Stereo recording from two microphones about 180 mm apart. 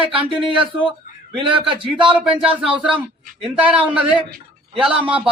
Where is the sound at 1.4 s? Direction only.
30° right (ahead or behind).